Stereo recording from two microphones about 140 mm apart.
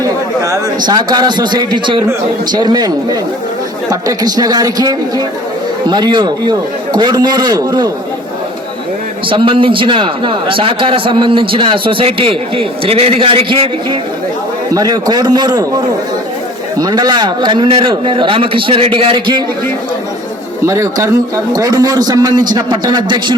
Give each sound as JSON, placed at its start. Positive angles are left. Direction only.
{"t": 0.0, "sound": "chatter", "side_deg": -20}
{"t": 0.9, "sound": "a man's voice", "side_deg": -30}
{"t": 9.3, "sound": "a man's voice", "side_deg": -35}
{"t": 14.7, "sound": "a man's voice", "side_deg": -25}
{"t": 16.7, "sound": "a man's voice", "side_deg": -30}
{"t": 20.7, "sound": "a man's voice", "side_deg": -20}